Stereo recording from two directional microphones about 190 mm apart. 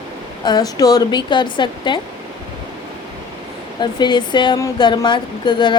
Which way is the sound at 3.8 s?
25° left (ahead or behind).